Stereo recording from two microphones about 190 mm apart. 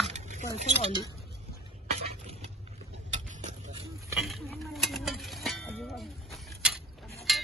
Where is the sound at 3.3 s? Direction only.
40° right (ahead or behind).